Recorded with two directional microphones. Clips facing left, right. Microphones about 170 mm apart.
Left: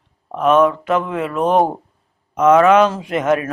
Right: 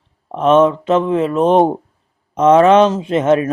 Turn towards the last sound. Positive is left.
turn(degrees=-25)  # may be behind; listen again after turning